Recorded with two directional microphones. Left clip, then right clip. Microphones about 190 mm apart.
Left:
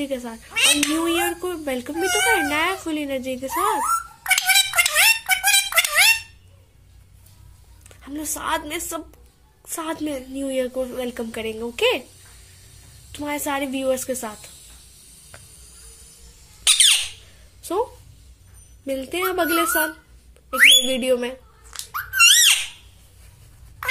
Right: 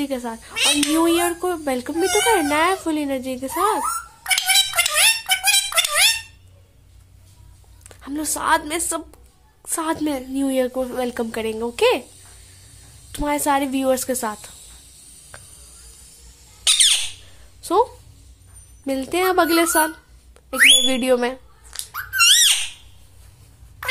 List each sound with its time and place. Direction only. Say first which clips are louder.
0.0 s speech: right 2 dB; 15° right (ahead or behind)
0.6 s a child's voice: left 1 dB; 5° right (ahead or behind)
0.9 s speech: right 4 dB; 15° right (ahead or behind)
3.8 s dog: left 3 dB; centre (ahead or behind)
7.9 s a woman's voice: right 4 dB; 15° right (ahead or behind)
13.1 s speech: right 6 dB; 15° right (ahead or behind)
15.3 s a sound: right 3 dB; 10° right (ahead or behind)
16.6 s squawk: even; 10° right (ahead or behind)
17.6 s a sound: right 6 dB; 10° right (ahead or behind)
18.9 s speech: right 4 dB; 15° right (ahead or behind)
20.4 s whistling: even; 10° right (ahead or behind)